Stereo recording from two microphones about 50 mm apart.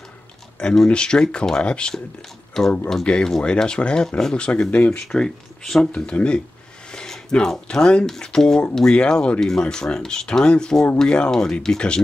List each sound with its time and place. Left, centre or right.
0.6 s speech: centre
5.0 s speech: centre
6.1 s speech: centre